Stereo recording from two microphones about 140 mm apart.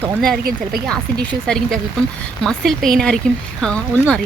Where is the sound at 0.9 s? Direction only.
5° left (ahead or behind).